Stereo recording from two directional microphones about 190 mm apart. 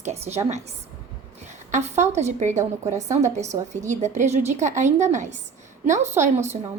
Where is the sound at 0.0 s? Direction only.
35° right (ahead or behind).